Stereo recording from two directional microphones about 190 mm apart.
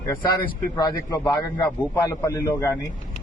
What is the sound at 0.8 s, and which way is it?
A man's voice, 20° left (ahead or behind).